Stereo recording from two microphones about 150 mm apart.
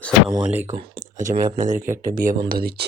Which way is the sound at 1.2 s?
60° right (ahead or behind).